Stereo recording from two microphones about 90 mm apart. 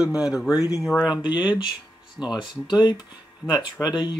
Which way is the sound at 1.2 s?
55° left (ahead or behind).